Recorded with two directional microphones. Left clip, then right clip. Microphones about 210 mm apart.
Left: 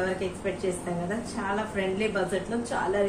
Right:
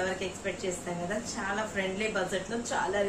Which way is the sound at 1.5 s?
10° right (ahead or behind).